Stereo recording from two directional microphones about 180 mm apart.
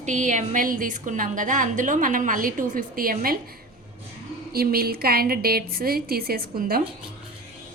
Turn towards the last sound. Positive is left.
turn(degrees=-55)  # may be behind; listen again after turning